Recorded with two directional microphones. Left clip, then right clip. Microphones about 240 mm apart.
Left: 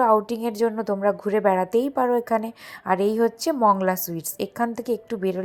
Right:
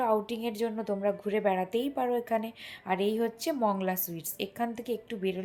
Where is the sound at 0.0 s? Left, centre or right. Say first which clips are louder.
Left 9 dB; left.